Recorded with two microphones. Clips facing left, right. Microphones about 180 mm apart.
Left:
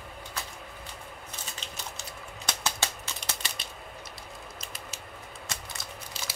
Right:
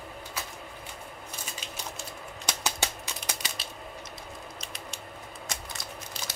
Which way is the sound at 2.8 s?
15° right (ahead or behind).